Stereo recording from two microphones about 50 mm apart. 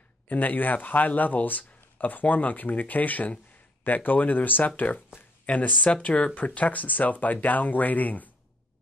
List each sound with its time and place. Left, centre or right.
0.3 s speech: left